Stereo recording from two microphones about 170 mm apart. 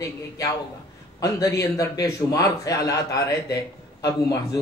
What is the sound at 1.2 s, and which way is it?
A man's voice, 20° left (ahead or behind).